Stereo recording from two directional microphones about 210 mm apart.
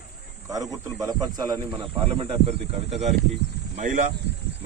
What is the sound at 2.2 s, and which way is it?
Speech, 30° right (ahead or behind).